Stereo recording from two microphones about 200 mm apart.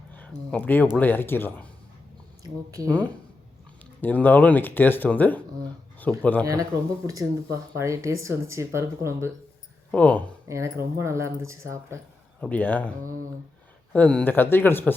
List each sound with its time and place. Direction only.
0.1 s speech: 10° left (ahead or behind)
2.8 s speech: 10° left (ahead or behind)
6.4 s speech: 15° right (ahead or behind)
9.9 s speech: 5° left (ahead or behind)
10.5 s speech: 15° right (ahead or behind)
12.4 s speech: 5° left (ahead or behind)
13.9 s speech: 5° left (ahead or behind)